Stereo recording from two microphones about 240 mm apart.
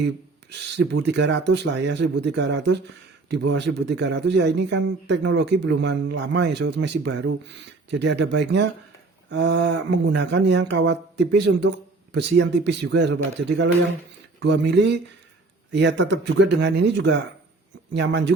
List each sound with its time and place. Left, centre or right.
0.8 s speech: right